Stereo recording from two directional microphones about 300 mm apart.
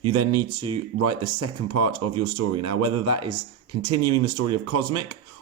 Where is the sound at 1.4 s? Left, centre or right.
Right.